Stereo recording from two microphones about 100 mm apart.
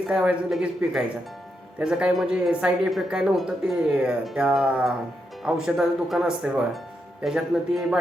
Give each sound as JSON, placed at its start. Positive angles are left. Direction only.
{"t": 0.1, "sound": "speech", "side_deg": -10}